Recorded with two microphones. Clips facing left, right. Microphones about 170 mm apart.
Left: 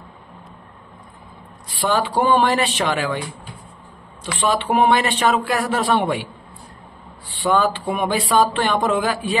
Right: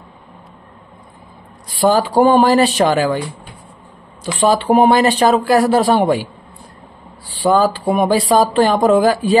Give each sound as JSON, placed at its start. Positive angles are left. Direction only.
{"t": 1.7, "sound": "speech", "side_deg": -40}
{"t": 4.4, "sound": "speech", "side_deg": -40}
{"t": 7.2, "sound": "speech", "side_deg": -35}